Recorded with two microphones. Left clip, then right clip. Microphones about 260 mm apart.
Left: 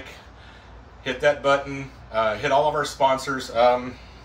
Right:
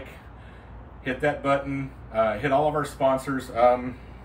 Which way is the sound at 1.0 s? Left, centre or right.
Centre.